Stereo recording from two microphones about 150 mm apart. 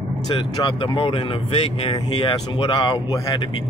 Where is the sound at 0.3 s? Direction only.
35° left (ahead or behind).